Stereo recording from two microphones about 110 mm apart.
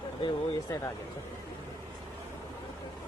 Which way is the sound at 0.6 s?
30° left (ahead or behind).